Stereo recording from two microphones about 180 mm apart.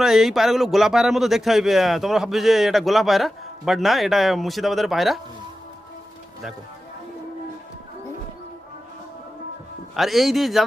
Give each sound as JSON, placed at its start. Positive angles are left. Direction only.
{"t": 0.0, "sound": "a man's voice", "side_deg": 0}
{"t": 9.9, "sound": "a man's voice", "side_deg": 0}